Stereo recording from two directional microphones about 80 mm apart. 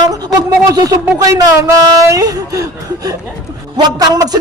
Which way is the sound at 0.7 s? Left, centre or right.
Right.